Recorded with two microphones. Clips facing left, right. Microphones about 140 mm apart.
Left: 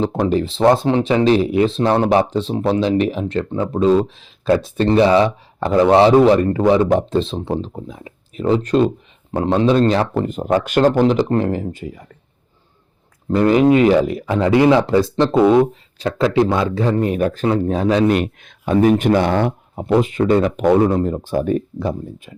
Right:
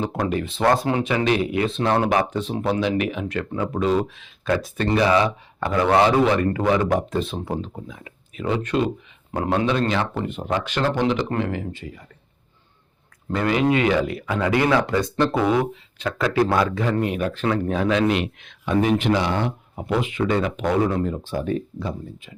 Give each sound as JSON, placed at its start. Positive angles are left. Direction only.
{"t": 0.3, "sound": "speech", "side_deg": 30}
{"t": 13.3, "sound": "speech", "side_deg": 40}
{"t": 14.3, "sound": "speech", "side_deg": 25}
{"t": 18.1, "sound": "speech", "side_deg": 45}
{"t": 19.7, "sound": "speech", "side_deg": 35}